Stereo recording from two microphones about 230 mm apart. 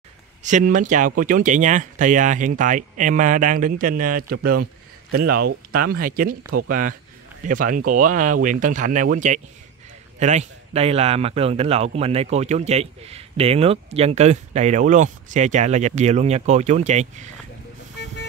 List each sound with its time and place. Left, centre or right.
0.4 s speech: right